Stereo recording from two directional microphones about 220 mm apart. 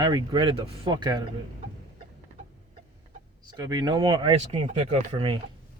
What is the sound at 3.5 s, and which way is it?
Speech, 15° right (ahead or behind).